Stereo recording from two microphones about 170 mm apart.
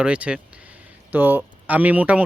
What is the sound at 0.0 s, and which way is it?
Speech, 5° right (ahead or behind).